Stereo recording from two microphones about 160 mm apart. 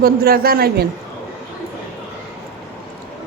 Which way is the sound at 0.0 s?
70° right (ahead or behind).